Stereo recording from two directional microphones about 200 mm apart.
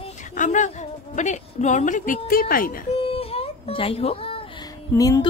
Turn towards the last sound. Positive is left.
turn(degrees=20)  # may be behind; listen again after turning